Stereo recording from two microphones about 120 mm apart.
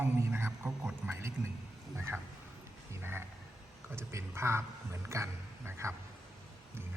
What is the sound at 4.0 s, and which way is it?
A man's voice, 20° right (ahead or behind).